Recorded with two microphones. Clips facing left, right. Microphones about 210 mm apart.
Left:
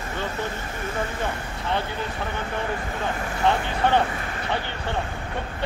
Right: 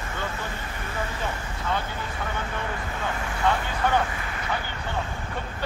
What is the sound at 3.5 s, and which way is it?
Speech, 25° left (ahead or behind).